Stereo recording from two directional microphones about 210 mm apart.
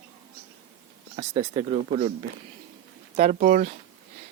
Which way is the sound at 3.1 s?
35° right (ahead or behind).